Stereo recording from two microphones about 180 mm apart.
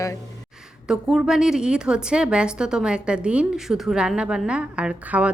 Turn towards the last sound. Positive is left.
turn(degrees=-5)  # may be behind; listen again after turning